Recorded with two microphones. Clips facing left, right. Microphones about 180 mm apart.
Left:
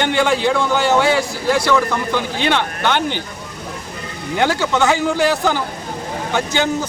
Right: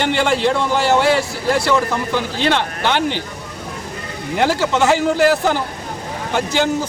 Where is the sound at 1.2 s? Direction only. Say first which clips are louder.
Left 1 dB; 25° right (ahead or behind).